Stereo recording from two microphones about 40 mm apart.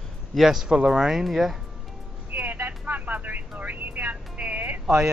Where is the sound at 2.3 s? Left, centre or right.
Right.